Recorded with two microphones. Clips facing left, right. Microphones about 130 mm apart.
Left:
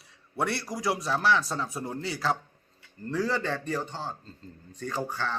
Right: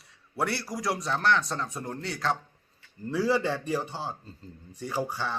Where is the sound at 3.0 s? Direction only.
10° right (ahead or behind).